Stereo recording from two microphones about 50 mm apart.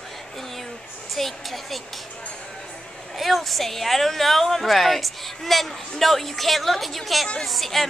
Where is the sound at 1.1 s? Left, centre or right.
Centre.